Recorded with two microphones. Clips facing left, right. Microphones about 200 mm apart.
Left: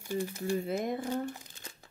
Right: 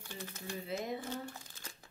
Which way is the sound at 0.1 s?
10° left (ahead or behind).